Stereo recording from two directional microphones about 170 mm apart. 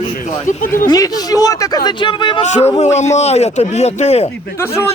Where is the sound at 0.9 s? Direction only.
20° left (ahead or behind).